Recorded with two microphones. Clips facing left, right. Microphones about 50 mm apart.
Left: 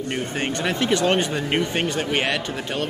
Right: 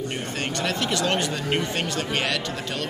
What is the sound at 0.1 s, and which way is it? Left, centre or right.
Speech, left.